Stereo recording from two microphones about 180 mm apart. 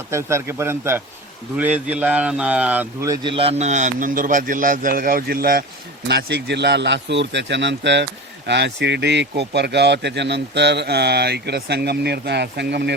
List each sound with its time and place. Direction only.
0.1 s speech: 15° right (ahead or behind)
3.1 s a man's voice: 30° right (ahead or behind); by 5.6 s 55° right (ahead or behind)
6.1 s speech: 65° right (ahead or behind)